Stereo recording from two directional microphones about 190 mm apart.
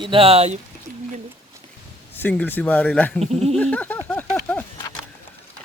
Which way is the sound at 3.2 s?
35° right (ahead or behind).